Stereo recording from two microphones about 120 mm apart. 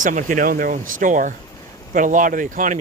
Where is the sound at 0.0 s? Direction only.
90° right.